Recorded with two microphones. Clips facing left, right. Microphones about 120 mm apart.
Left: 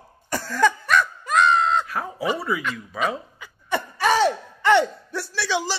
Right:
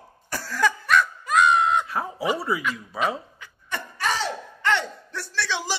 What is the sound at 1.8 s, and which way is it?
Speech, 25° right (ahead or behind).